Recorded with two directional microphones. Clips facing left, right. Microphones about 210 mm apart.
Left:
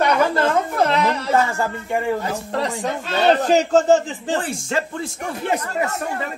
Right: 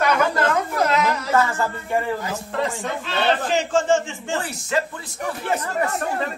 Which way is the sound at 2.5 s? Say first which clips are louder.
Left 1 dB; 40° left (ahead or behind).